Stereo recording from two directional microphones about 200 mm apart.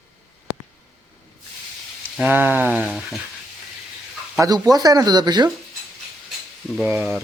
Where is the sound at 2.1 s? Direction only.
10° right (ahead or behind).